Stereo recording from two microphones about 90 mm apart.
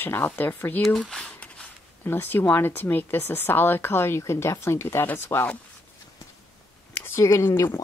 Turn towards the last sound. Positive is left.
turn(degrees=30)  # may be behind; listen again after turning